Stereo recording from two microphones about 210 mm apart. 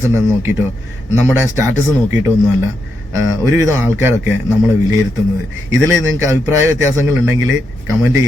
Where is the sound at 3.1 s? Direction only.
15° right (ahead or behind).